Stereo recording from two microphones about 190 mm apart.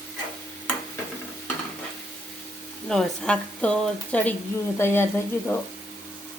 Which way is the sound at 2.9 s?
5° left (ahead or behind).